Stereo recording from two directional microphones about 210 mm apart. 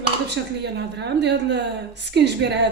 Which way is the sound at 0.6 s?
55° right (ahead or behind).